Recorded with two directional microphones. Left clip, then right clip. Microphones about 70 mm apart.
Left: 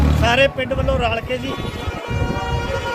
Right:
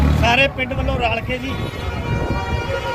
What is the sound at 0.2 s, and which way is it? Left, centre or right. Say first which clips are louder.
Speech: even; left.